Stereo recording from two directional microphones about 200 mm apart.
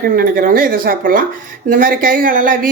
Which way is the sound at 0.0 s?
45° right (ahead or behind).